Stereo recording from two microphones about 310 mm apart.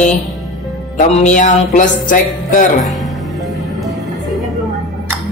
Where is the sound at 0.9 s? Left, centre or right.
Left.